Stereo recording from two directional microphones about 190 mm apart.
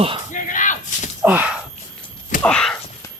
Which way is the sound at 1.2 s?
5° right (ahead or behind).